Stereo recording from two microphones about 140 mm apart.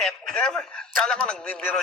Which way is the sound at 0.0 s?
5° left (ahead or behind).